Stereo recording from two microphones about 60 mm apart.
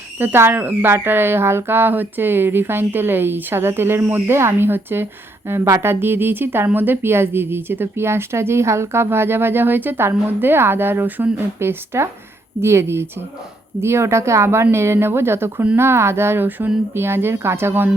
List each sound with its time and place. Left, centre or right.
0.2 s speech: right